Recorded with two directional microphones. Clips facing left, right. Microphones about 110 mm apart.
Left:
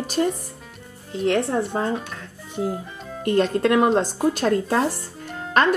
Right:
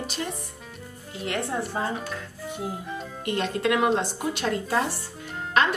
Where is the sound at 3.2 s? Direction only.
40° left (ahead or behind).